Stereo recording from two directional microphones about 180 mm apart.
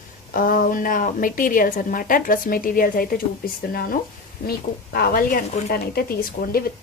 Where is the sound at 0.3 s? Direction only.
50° left (ahead or behind).